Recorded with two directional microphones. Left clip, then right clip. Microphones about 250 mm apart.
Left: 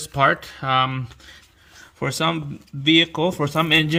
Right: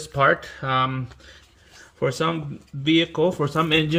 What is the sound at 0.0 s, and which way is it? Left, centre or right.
A man's voice, left.